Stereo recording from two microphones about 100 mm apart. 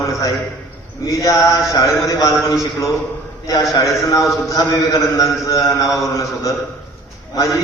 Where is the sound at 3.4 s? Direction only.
35° left (ahead or behind).